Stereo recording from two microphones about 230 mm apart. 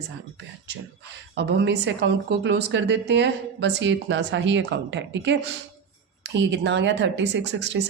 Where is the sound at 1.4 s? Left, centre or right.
Right.